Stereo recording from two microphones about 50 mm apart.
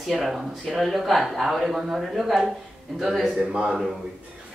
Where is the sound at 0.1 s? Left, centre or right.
Centre.